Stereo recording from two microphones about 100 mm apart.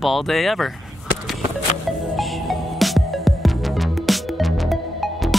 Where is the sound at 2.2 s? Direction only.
Centre (ahead or behind).